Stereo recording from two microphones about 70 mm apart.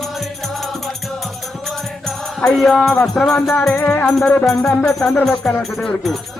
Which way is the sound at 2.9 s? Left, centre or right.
Left.